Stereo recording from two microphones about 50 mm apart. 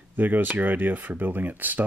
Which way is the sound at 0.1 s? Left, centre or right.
Right.